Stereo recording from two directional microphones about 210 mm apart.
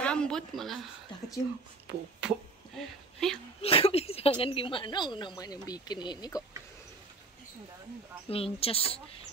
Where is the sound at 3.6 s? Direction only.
30° left (ahead or behind).